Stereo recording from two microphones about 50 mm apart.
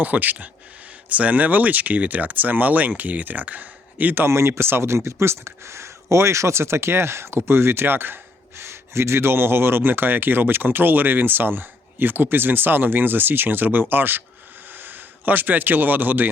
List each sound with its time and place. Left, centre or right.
0.0 s speech: right
4.3 s speech: right
8.5 s speech: right